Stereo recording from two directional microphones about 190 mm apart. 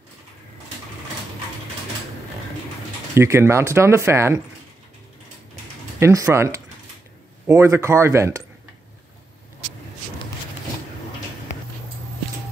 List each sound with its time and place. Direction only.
3.2 s speech: 15° right (ahead or behind)
5.9 s speech: 15° right (ahead or behind)